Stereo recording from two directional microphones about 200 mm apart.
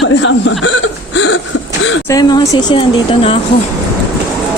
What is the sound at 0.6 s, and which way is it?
Hiccup, 65° left (ahead or behind).